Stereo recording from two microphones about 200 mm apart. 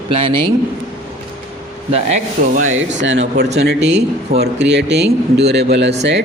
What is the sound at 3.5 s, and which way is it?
A man's voice, 55° right (ahead or behind).